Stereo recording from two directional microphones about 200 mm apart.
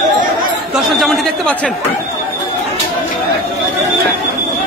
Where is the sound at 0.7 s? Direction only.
Centre (ahead or behind).